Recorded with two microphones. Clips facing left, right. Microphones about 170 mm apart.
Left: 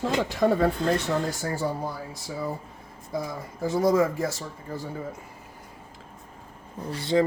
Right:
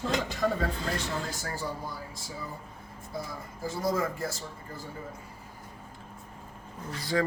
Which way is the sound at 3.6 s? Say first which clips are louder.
Left 8 dB; 75° left (ahead or behind).